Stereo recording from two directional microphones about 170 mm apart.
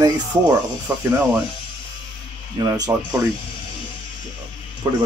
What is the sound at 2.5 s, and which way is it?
Speech, 25° right (ahead or behind).